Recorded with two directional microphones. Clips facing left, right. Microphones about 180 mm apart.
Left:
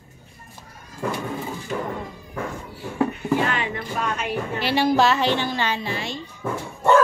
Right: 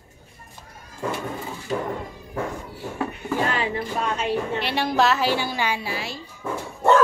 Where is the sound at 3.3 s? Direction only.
35° right (ahead or behind).